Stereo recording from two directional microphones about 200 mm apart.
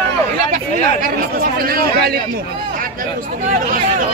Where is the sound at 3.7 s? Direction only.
45° right (ahead or behind).